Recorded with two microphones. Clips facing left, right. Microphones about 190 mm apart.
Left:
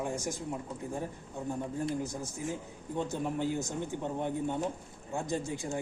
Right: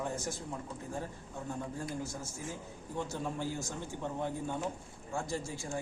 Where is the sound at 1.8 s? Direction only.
15° left (ahead or behind).